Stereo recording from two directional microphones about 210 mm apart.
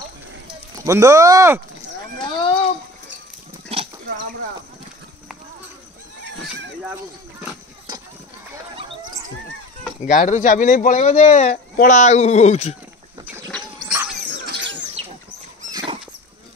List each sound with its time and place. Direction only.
0.7 s speech: 15° right (ahead or behind)
2.3 s a sound: 25° left (ahead or behind)
10.0 s speech: 35° left (ahead or behind)
13.5 s bird: centre (ahead or behind)